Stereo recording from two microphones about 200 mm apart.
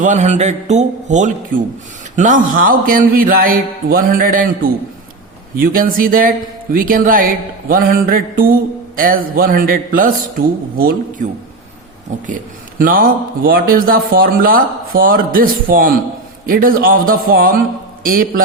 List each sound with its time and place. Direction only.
0.0 s a man's voice: 35° right (ahead or behind)
12.8 s speech: 45° right (ahead or behind)